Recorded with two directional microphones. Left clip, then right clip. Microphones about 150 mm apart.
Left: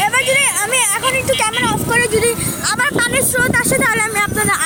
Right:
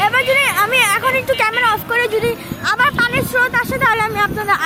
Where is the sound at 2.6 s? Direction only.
15° left (ahead or behind).